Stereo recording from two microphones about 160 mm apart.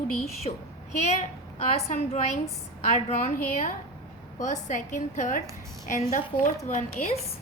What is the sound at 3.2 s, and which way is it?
A woman's voice, 55° left (ahead or behind).